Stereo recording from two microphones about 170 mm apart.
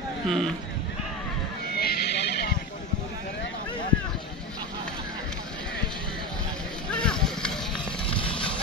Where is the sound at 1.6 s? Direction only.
65° left (ahead or behind).